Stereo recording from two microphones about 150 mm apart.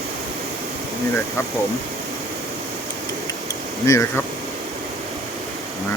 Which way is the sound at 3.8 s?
20° left (ahead or behind).